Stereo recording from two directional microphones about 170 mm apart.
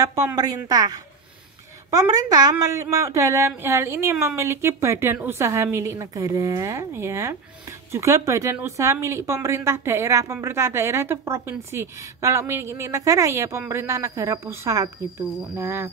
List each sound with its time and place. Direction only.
0.0 s speech: 20° right (ahead or behind)